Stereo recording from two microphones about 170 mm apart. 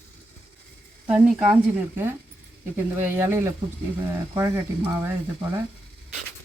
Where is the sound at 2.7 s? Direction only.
15° right (ahead or behind).